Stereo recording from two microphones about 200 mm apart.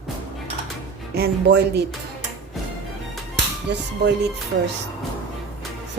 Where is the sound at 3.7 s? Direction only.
60° right (ahead or behind).